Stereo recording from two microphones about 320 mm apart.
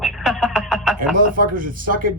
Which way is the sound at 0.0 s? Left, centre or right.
Centre.